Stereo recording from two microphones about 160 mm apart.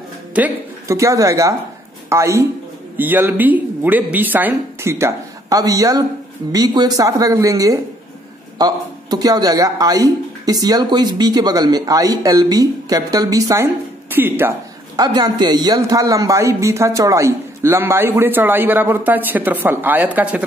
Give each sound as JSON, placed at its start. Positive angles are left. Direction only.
{"t": 0.3, "sound": "a woman's voice", "side_deg": -15}
{"t": 15.0, "sound": "a man's voice", "side_deg": -25}